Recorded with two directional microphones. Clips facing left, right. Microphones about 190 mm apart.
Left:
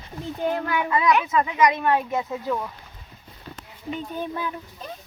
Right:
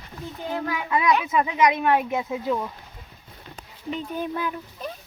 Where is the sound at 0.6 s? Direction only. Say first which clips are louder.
Left 3 dB; 60° left (ahead or behind).